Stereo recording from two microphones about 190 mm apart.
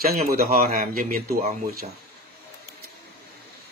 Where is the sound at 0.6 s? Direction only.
40° right (ahead or behind).